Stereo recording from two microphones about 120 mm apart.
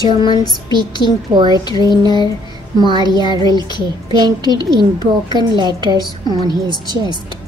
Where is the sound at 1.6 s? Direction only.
35° left (ahead or behind).